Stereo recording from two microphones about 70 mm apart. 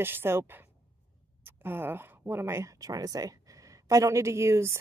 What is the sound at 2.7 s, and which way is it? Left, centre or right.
Speech, right.